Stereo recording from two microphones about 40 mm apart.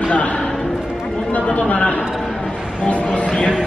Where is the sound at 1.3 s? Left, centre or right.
Left.